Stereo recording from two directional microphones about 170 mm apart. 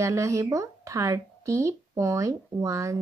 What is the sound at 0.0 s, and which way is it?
Speech, 20° right (ahead or behind).